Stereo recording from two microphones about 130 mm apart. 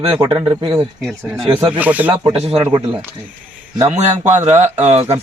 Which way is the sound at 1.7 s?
10° right (ahead or behind).